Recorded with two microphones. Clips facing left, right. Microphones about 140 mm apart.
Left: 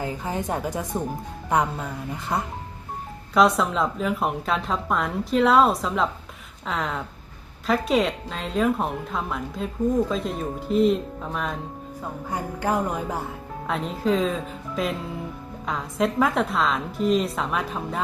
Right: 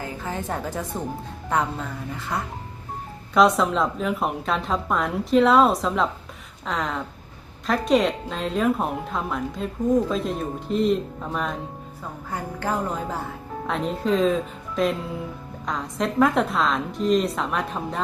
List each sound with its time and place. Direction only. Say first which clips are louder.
0.0 s a woman's voice: left 2 dB; 15° left (ahead or behind)
3.3 s a woman's voice: right 1 dB; centre (ahead or behind)
12.3 s a woman's voice: left 2 dB; 10° left (ahead or behind)
13.7 s a woman's voice: even; centre (ahead or behind)